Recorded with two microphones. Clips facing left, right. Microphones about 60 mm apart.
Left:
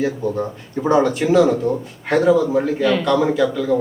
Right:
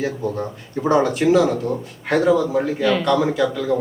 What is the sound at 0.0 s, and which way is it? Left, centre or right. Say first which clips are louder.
A man's voice: left 3 dB; centre.